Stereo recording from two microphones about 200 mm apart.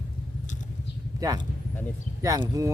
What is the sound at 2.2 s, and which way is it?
Speech, 15° right (ahead or behind).